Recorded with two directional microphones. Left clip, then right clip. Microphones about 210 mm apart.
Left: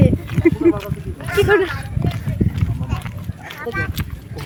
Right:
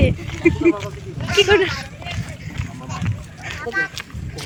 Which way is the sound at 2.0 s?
5° right (ahead or behind).